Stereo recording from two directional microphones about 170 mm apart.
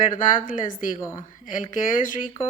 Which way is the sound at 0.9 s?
15° left (ahead or behind).